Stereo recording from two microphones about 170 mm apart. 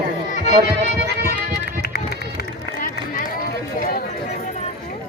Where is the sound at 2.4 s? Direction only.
55° left (ahead or behind).